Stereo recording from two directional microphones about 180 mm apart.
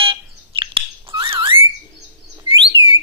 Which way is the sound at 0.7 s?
30° right (ahead or behind).